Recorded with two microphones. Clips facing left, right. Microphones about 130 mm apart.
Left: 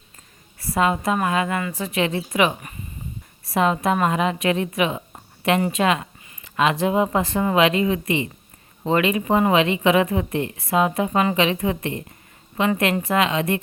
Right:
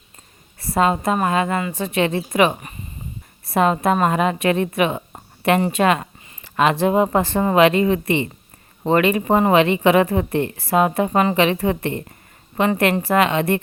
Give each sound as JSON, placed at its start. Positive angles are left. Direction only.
{"t": 0.6, "sound": "a sound", "side_deg": -35}
{"t": 1.1, "sound": "speech", "side_deg": -35}
{"t": 1.6, "sound": "speech", "side_deg": -25}
{"t": 2.0, "sound": "a woman's voice", "side_deg": -45}